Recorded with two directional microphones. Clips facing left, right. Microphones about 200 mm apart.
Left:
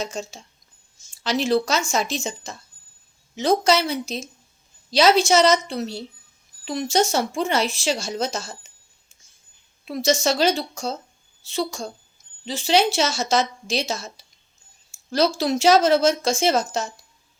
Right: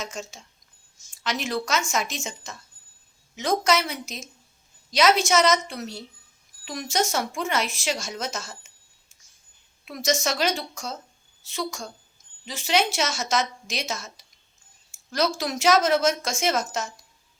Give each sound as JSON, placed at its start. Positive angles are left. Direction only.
{"t": 0.0, "sound": "speech", "side_deg": 30}
{"t": 9.8, "sound": "a woman's voice", "side_deg": 30}